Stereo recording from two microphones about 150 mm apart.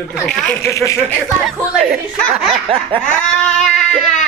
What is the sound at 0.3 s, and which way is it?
Speech, 5° left (ahead or behind).